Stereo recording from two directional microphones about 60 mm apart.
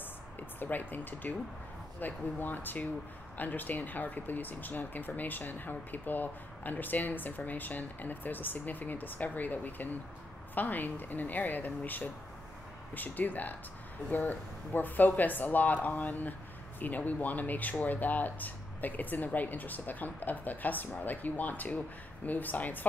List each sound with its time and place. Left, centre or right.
0.6 s speech: left